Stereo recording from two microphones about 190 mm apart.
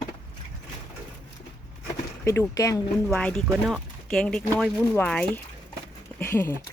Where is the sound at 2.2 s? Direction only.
15° left (ahead or behind).